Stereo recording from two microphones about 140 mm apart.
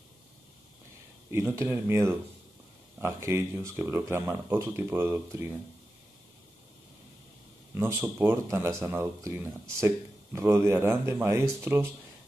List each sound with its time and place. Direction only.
1.3 s speech: 20° right (ahead or behind)
7.7 s speech: 20° right (ahead or behind)